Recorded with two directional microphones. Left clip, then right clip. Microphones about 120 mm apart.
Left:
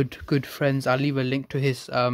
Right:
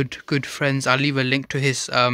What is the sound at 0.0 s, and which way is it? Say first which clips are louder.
Speech: right 2 dB; 5° left (ahead or behind).